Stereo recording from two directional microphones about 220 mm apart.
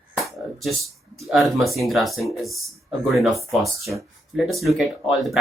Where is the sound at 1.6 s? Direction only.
Centre (ahead or behind).